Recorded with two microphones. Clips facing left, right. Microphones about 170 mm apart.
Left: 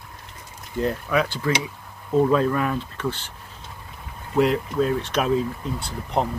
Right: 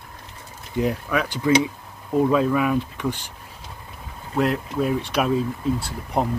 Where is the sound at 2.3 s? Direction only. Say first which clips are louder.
Right 1 dB; 5° right (ahead or behind).